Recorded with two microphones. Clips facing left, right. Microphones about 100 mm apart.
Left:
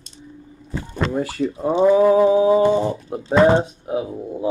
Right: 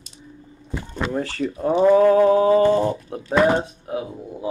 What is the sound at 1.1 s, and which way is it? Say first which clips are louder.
Mantra: left 1 dB; 10° left (ahead or behind).